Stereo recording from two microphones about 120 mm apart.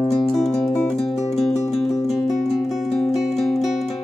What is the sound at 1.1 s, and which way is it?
Music, 65° left (ahead or behind).